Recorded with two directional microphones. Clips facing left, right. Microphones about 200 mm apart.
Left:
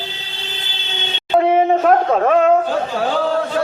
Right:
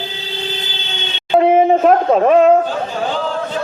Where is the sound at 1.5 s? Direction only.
30° right (ahead or behind).